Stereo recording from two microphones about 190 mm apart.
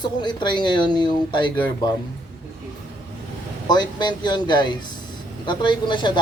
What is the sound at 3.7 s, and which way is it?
Speech, 25° left (ahead or behind).